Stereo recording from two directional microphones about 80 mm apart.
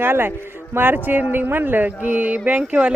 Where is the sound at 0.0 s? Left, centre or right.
Right.